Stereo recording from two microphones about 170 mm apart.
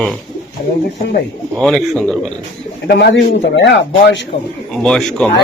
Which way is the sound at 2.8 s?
75° left (ahead or behind).